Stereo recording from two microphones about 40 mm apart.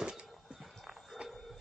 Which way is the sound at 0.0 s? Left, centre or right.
Right.